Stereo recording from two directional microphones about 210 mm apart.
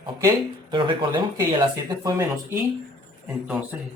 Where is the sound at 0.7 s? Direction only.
25° right (ahead or behind).